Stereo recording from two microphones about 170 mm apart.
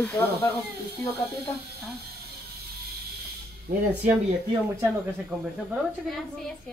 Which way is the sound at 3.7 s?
55° right (ahead or behind).